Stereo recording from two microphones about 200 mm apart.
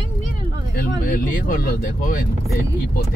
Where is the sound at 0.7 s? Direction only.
45° left (ahead or behind).